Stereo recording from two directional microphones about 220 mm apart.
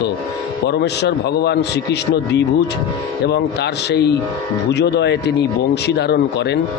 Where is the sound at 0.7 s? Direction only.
50° left (ahead or behind).